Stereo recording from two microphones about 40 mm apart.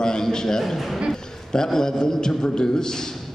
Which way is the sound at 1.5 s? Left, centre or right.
Centre.